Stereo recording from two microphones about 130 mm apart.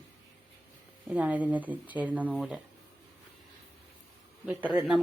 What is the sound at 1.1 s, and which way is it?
Speech, 10° right (ahead or behind).